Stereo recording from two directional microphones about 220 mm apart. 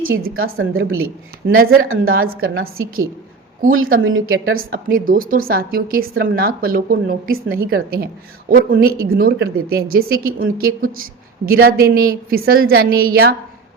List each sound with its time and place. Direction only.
0.0 s a woman's voice: 40° right (ahead or behind)
0.4 s a woman's voice: 65° right (ahead or behind)
3.7 s a woman's voice: 70° right (ahead or behind)
4.7 s a woman's voice: 40° right (ahead or behind)
11.4 s a woman's voice: 45° right (ahead or behind)